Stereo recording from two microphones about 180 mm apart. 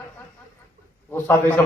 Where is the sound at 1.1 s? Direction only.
15° left (ahead or behind).